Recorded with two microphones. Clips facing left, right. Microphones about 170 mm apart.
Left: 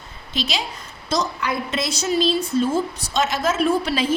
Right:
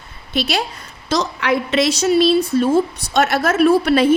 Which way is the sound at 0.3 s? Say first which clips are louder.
Right 6 dB; 65° right (ahead or behind).